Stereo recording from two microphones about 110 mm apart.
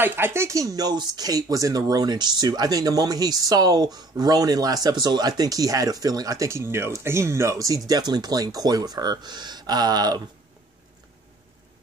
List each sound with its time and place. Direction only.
0.0 s speech: 20° right (ahead or behind); by 10.2 s 35° right (ahead or behind)